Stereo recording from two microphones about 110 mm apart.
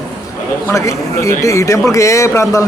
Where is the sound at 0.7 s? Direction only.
30° left (ahead or behind).